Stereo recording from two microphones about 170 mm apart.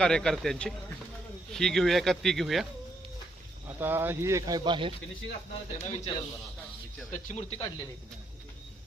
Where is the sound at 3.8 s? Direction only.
10° right (ahead or behind); by 4.9 s 30° right (ahead or behind).